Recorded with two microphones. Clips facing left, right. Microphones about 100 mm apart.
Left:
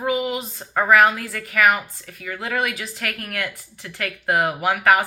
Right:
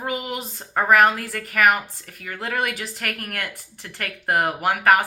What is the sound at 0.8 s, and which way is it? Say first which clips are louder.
Speech: left 1 dB; 40° right (ahead or behind).